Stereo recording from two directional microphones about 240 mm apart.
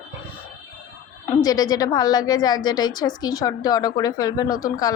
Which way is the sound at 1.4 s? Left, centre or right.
Centre.